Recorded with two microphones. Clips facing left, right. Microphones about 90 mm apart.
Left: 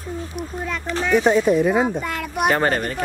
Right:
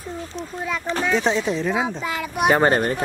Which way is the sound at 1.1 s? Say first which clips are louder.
Left 8 dB; 10° left (ahead or behind).